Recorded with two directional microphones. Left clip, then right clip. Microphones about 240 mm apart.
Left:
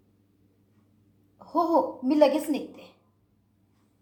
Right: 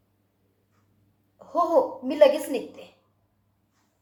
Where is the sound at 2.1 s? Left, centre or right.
Centre.